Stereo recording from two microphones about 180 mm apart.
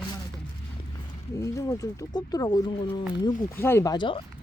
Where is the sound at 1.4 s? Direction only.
15° left (ahead or behind).